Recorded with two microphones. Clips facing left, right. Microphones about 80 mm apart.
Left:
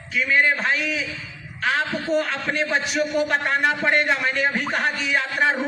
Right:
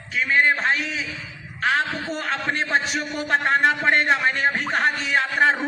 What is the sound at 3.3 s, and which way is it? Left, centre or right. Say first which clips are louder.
A man's voice: right 2 dB; right.